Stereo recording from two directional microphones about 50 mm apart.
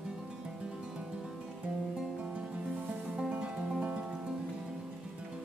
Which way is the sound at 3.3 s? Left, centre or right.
Right.